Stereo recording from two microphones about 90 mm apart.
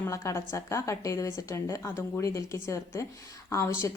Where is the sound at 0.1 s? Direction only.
35° left (ahead or behind).